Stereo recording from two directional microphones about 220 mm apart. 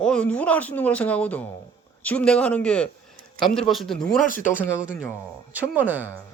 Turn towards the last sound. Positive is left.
turn(degrees=-10)  # may be behind; listen again after turning